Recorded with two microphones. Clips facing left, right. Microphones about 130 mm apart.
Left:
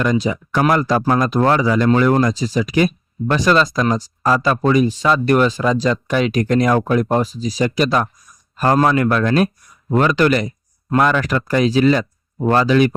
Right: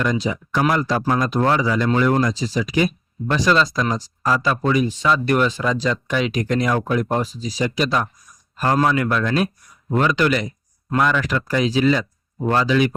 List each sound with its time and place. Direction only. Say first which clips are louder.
0.0 s speech: left 4 dB; 60° left (ahead or behind)